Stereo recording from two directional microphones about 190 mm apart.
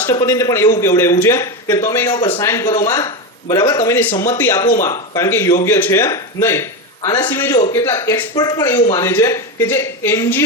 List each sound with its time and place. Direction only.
0.0 s speech: 15° left (ahead or behind)